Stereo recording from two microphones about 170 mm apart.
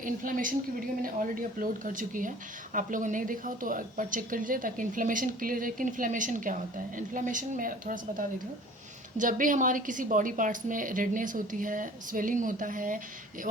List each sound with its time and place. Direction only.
0.0 s speech: 50° right (ahead or behind)